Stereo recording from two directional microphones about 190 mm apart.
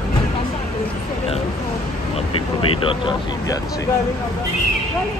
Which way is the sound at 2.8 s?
25° left (ahead or behind).